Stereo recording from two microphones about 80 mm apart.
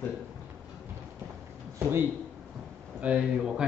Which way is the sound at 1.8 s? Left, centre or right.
Right.